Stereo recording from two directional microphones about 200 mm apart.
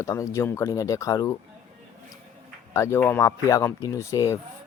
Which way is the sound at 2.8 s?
15° left (ahead or behind).